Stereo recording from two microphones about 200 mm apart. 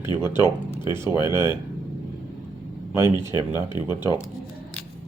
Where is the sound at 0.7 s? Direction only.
20° left (ahead or behind).